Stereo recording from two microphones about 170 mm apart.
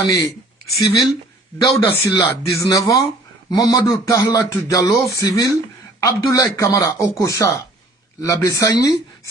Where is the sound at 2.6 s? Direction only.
20° left (ahead or behind).